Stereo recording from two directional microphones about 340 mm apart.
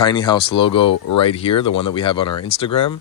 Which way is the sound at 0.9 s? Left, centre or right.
Left.